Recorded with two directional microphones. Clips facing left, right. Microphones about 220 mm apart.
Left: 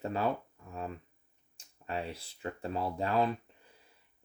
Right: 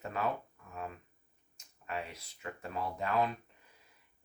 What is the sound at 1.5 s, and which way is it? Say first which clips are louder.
Speech: left 3 dB; 30° left (ahead or behind).